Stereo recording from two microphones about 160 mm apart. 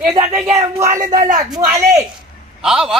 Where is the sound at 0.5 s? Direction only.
20° right (ahead or behind).